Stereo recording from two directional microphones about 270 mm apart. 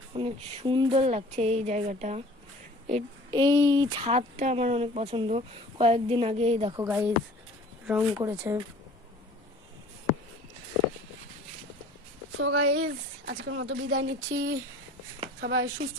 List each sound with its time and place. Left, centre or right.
0.1 s a woman's voice: right
12.4 s speech: right